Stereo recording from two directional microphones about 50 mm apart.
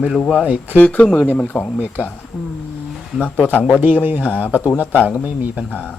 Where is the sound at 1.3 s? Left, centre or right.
Left.